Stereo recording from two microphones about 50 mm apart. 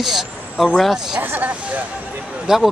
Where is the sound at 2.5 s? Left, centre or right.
Centre.